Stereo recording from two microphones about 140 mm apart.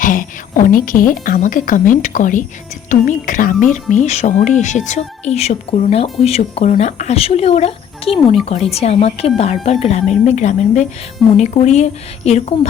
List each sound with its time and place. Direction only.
0.0 s a woman's voice: 75° left (ahead or behind); by 12.5 s 50° left (ahead or behind)